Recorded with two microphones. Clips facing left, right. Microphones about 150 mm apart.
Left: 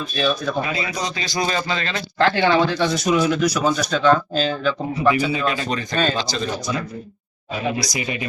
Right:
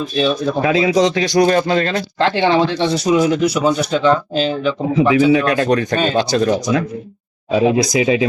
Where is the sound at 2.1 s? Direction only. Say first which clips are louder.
Right 2 dB; 25° right (ahead or behind).